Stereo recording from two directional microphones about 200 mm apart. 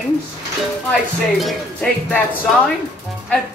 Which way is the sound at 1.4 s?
5° left (ahead or behind).